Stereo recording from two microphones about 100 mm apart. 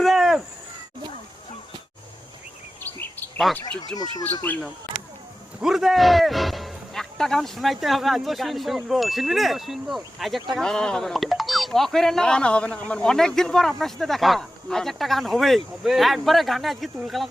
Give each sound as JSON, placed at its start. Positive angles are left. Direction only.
{"t": 0.0, "sound": "a sound", "side_deg": 0}
{"t": 2.8, "sound": "bird vocalization", "side_deg": 20}
{"t": 3.5, "sound": "speech", "side_deg": 0}
{"t": 5.6, "sound": "speech", "side_deg": -5}